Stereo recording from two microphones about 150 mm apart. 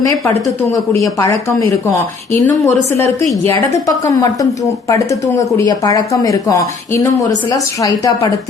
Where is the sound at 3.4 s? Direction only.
20° left (ahead or behind).